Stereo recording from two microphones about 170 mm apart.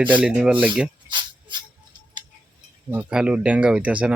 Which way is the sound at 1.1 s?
25° right (ahead or behind).